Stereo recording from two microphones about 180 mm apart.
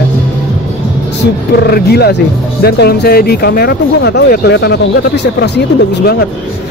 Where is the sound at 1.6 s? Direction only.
60° left (ahead or behind).